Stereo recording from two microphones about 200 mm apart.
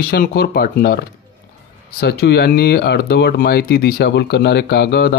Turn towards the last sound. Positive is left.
turn(degrees=55)  # may be behind; listen again after turning